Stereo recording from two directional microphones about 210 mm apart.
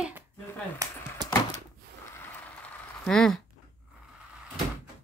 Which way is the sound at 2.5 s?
5° left (ahead or behind).